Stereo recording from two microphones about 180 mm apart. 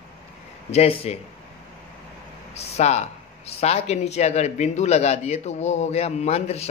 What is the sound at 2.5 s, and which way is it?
Speech, 35° left (ahead or behind).